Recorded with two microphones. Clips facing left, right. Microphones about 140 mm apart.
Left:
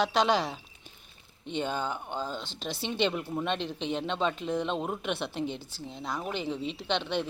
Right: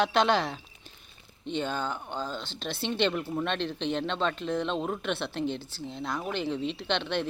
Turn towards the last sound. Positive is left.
turn(degrees=5)  # may be behind; listen again after turning